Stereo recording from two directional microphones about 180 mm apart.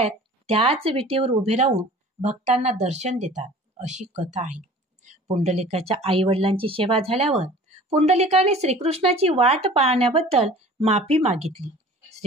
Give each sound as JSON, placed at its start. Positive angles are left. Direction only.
{"t": 0.0, "sound": "speech", "side_deg": -35}